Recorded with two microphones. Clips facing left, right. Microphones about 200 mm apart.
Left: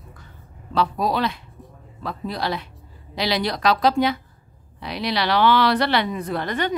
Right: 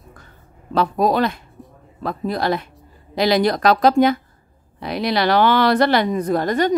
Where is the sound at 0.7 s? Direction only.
50° right (ahead or behind).